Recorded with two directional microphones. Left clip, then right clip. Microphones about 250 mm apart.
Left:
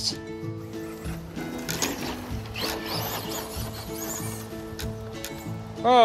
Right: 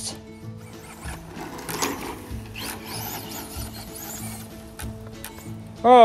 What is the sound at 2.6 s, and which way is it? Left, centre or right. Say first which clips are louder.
Music: left 5 dB; centre.